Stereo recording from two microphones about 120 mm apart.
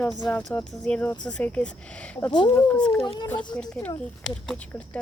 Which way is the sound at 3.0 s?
40° left (ahead or behind).